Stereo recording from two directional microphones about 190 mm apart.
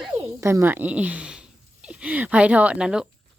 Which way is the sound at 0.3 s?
15° right (ahead or behind).